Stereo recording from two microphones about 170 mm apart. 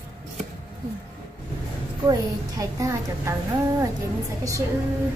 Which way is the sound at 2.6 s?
15° right (ahead or behind).